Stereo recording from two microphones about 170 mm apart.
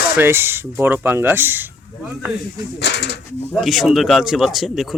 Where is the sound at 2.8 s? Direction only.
80° left.